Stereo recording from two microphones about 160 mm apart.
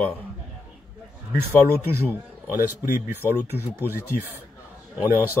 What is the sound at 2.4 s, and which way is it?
Speech, 15° right (ahead or behind).